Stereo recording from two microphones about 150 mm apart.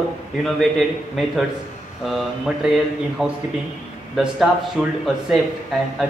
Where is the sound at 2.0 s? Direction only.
Centre (ahead or behind).